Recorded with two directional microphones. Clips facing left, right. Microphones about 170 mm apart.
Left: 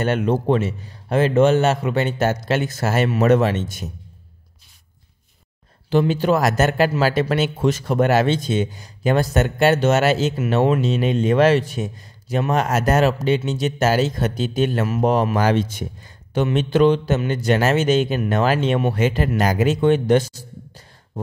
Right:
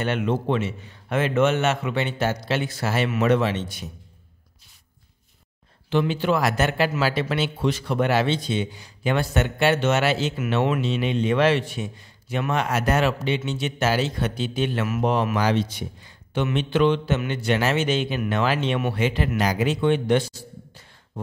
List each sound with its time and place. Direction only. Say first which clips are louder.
0.0 s a man's voice: left 4 dB; 40° left (ahead or behind)
5.9 s a man's voice: left 4 dB; 40° left (ahead or behind)